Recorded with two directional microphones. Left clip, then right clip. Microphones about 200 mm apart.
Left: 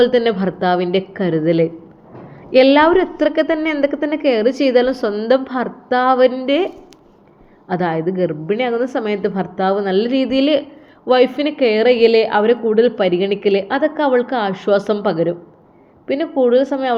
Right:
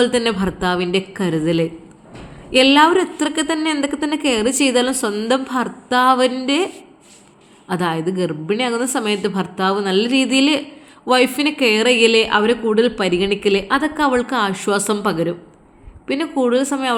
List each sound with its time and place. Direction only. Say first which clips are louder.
0.0 s a woman's voice: left 3 dB; 30° right (ahead or behind)
7.7 s speech: left 2 dB; 30° right (ahead or behind)